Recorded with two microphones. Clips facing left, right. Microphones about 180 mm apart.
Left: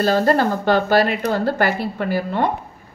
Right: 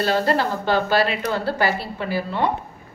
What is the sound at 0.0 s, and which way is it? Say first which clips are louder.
Speech: left 4 dB; 45° left (ahead or behind).